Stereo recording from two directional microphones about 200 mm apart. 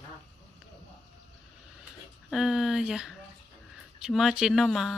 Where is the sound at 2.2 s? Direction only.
Centre (ahead or behind).